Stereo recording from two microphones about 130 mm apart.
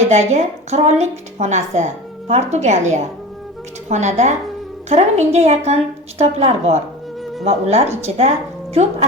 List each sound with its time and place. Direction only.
0.0 s a woman's voice: 60° right (ahead or behind)